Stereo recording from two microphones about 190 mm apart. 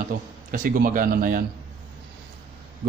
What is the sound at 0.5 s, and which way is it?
Speech, 45° right (ahead or behind).